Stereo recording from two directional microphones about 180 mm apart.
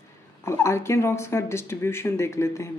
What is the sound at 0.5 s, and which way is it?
Speech, 15° left (ahead or behind).